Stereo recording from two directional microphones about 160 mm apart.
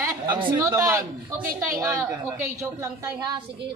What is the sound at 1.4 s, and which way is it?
Speech, 60° right (ahead or behind).